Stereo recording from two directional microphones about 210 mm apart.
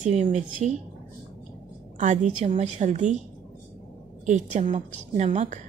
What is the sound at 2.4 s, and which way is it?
Speech, 35° right (ahead or behind).